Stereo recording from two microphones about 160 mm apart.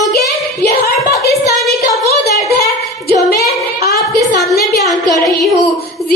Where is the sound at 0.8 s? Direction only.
70° left (ahead or behind).